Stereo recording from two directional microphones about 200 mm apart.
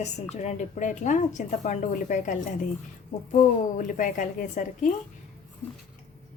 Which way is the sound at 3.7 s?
40° left (ahead or behind).